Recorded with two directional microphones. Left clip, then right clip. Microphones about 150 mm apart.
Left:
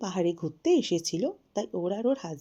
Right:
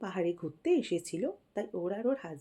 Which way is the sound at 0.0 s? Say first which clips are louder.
Left 5 dB; 45° left (ahead or behind).